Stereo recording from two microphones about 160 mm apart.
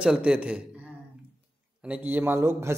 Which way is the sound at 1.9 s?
10° right (ahead or behind).